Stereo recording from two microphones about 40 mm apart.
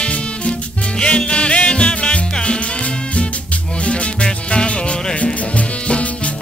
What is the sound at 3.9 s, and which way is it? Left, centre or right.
Music, left.